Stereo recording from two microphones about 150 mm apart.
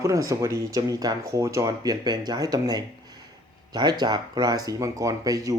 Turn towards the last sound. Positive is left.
turn(degrees=-25)  # may be behind; listen again after turning